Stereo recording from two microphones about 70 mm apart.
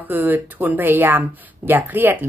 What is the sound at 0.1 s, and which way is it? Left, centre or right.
Speech, right.